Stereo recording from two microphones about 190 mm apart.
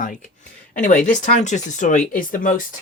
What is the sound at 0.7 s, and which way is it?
Speech, 40° left (ahead or behind).